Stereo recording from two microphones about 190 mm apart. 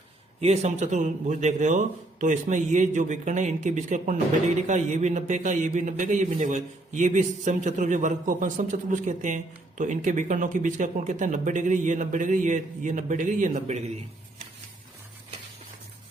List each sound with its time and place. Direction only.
0.4 s a man's voice: 35° right (ahead or behind)